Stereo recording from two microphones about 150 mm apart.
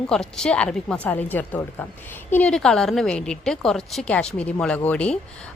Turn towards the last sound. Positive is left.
turn(degrees=10)  # may be behind; listen again after turning